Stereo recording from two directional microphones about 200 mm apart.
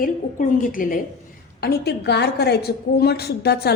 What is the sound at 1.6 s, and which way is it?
A woman's voice, 55° left (ahead or behind).